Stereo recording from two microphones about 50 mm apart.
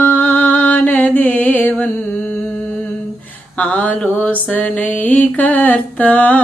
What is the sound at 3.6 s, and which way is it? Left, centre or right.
Mantra, left.